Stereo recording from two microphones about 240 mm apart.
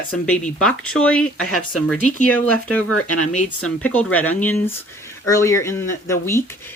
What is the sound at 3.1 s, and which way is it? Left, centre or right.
Speech, left.